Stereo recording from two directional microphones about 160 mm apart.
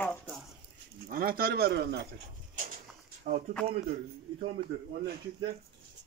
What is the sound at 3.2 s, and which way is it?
Speech, 50° right (ahead or behind).